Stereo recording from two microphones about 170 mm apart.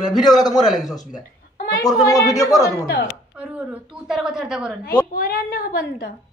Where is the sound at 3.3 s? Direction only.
5° right (ahead or behind).